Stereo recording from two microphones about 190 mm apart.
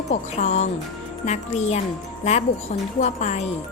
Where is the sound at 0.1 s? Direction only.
35° left (ahead or behind).